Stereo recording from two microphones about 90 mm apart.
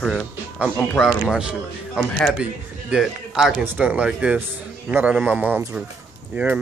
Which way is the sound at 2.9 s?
5° right (ahead or behind).